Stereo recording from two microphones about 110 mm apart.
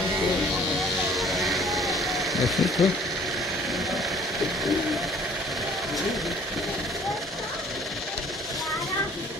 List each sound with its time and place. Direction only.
1.1 s vehicle: centre (ahead or behind)